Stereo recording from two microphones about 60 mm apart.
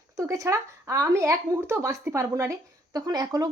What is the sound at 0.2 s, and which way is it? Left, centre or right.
A woman's voice, right.